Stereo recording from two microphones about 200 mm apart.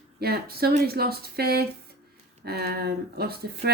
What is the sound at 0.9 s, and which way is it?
Speech, 50° right (ahead or behind).